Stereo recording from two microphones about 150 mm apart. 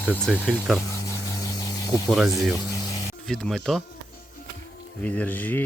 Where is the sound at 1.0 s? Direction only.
20° left (ahead or behind).